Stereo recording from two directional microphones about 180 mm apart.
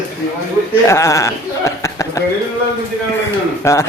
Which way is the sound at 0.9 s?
15° left (ahead or behind).